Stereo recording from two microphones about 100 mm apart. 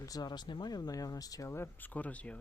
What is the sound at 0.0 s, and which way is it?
Speech, 40° left (ahead or behind).